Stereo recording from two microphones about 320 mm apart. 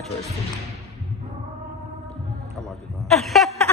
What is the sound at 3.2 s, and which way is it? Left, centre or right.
Chuckle, centre.